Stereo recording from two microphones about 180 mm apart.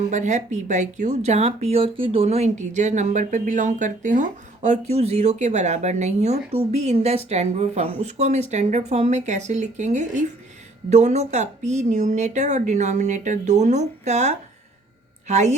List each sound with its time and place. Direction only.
0.1 s speech: 40° right (ahead or behind)